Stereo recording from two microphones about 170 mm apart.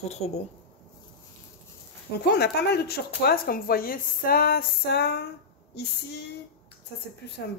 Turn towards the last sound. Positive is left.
turn(degrees=75)  # may be behind; listen again after turning